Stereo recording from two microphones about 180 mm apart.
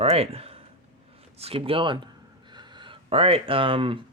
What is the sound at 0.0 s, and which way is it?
Speech, 35° right (ahead or behind).